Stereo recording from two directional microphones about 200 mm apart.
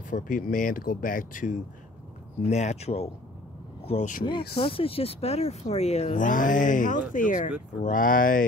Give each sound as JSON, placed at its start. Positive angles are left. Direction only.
{"t": 0.1, "sound": "speech", "side_deg": 40}
{"t": 4.6, "sound": "speech", "side_deg": 25}